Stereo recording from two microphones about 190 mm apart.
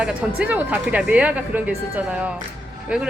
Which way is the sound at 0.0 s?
5° right (ahead or behind).